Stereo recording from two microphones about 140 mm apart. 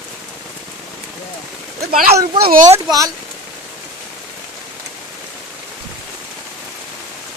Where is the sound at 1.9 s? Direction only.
90° right.